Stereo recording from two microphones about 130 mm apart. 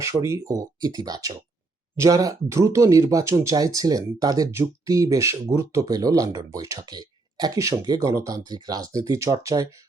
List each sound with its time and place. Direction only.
0.0 s speech: 25° right (ahead or behind)